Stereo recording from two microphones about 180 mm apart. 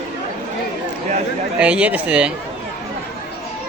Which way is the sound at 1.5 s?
5° right (ahead or behind).